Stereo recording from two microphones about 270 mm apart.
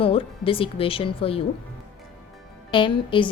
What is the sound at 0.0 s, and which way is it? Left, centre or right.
Speech, centre.